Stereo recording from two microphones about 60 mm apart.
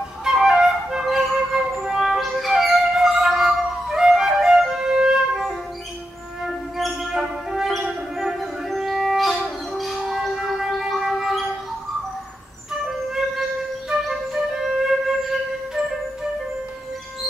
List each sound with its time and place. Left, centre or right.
0.2 s flute: centre
6.4 s music: centre
13.1 s music: centre